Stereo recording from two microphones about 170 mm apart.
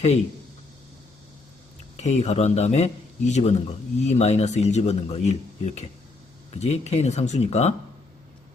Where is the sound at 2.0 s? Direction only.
40° left (ahead or behind).